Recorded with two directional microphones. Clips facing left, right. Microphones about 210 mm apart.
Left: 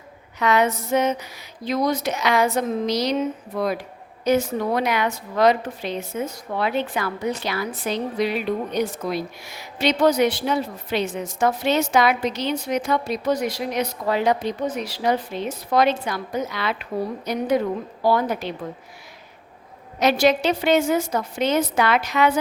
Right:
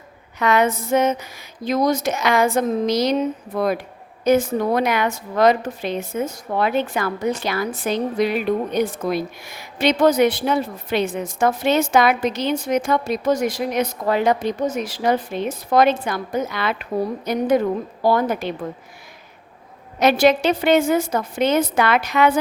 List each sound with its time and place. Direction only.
0.3 s a woman's voice: 50° right (ahead or behind)
20.0 s a woman's voice: 55° right (ahead or behind)